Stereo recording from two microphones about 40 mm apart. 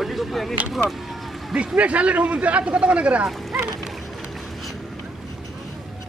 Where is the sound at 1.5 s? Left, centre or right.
Right.